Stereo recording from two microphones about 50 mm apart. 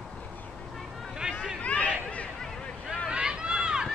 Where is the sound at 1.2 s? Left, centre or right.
Right.